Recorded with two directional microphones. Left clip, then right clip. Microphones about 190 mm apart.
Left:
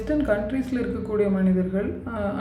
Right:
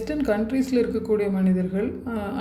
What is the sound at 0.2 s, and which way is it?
Speech, 35° right (ahead or behind).